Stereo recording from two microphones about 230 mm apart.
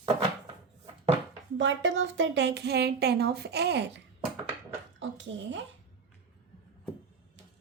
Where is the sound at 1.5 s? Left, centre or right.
Right.